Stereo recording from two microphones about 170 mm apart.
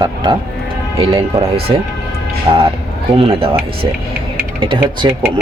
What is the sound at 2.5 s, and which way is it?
Speech, 30° right (ahead or behind).